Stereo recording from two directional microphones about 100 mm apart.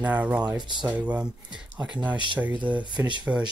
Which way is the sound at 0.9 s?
10° right (ahead or behind).